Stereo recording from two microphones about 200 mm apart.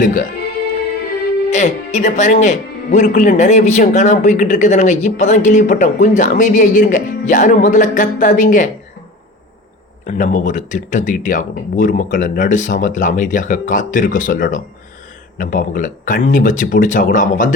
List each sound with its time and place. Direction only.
0.0 s speech: 40° left (ahead or behind)
1.5 s speech: 35° left (ahead or behind)
10.1 s speech: 35° left (ahead or behind)